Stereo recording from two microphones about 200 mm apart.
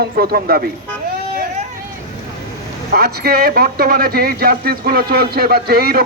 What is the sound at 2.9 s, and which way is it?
A man's voice, 50° right (ahead or behind).